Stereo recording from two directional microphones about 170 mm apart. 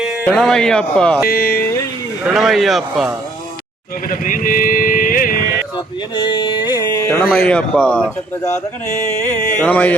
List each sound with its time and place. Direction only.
0.0 s speech: centre (ahead or behind)
1.2 s speech: 60° left (ahead or behind)
2.2 s a man's voice: centre (ahead or behind)
4.1 s speech: 50° left (ahead or behind)
5.7 s speech: 30° left (ahead or behind)
7.4 s music: 5° left (ahead or behind)
9.2 s music: 10° left (ahead or behind)